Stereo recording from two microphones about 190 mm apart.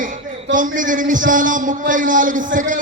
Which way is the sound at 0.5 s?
45° right (ahead or behind).